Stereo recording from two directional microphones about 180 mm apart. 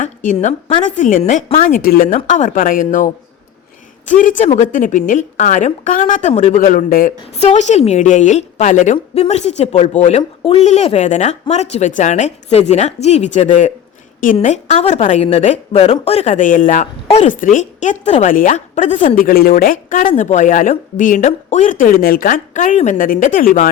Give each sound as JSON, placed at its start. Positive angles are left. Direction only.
{"t": 0.0, "sound": "a woman's voice", "side_deg": 45}